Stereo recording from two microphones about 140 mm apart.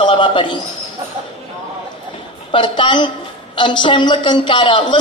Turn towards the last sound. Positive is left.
turn(degrees=35)  # may be behind; listen again after turning